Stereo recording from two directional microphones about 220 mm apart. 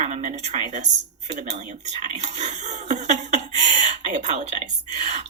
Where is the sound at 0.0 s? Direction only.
35° right (ahead or behind).